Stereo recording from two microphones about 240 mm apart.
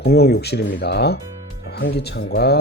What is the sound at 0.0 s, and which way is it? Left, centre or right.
Speech, left.